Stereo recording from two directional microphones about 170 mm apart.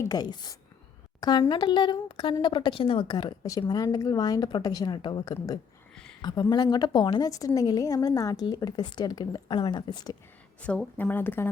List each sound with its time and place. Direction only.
0.0 s a woman's voice: 25° left (ahead or behind)
5.9 s a sound: 5° left (ahead or behind)
6.2 s a woman's voice: 25° left (ahead or behind)
10.6 s speech: 5° left (ahead or behind)